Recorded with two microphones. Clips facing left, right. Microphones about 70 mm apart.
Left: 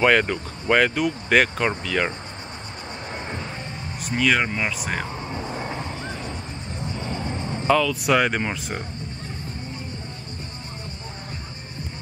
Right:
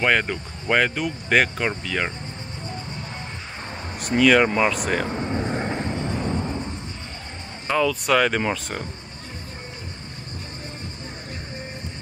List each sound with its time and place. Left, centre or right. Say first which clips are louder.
0.0 s speech: left 3 dB; centre
4.0 s speech: right 5 dB; centre
7.9 s speech: even; centre